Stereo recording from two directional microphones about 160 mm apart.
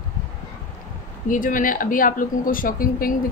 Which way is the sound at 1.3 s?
55° left (ahead or behind).